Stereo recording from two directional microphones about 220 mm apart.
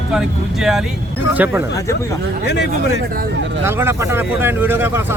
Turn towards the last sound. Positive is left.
turn(degrees=-10)  # may be behind; listen again after turning